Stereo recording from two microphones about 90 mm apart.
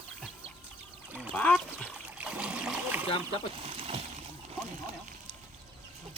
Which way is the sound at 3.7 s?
90° right.